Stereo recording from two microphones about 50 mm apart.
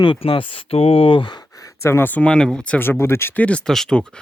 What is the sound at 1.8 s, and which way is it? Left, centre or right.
Speech, left.